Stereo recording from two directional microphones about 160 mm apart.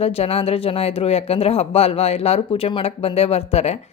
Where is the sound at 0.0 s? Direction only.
40° left (ahead or behind).